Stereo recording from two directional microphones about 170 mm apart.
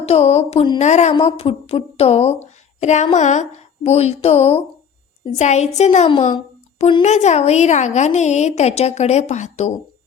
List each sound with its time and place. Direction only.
0.0 s a woman's voice: 40° left (ahead or behind)